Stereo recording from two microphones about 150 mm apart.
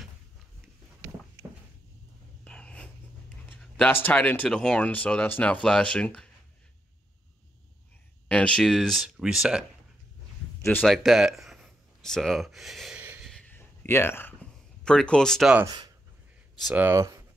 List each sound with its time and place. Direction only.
2.4 s a sound: 5° left (ahead or behind)
3.7 s speech: 10° left (ahead or behind)
8.3 s speech: 5° left (ahead or behind)
10.6 s speech: 15° left (ahead or behind)
10.9 s speech: centre (ahead or behind)
13.0 s a sound: 10° right (ahead or behind)
13.3 s a sound: 10° left (ahead or behind)
15.6 s speech: 25° right (ahead or behind)
16.7 s speech: 15° right (ahead or behind)